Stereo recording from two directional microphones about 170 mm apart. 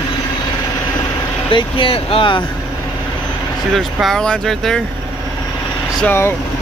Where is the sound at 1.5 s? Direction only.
30° left (ahead or behind).